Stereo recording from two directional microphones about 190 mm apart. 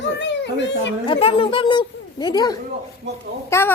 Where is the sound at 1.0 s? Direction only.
30° left (ahead or behind); by 3.7 s 10° left (ahead or behind).